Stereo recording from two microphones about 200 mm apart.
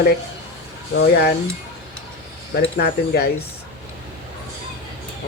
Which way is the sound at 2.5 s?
50° left (ahead or behind).